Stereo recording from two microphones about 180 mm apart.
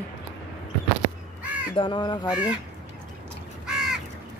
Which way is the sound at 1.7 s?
25° left (ahead or behind).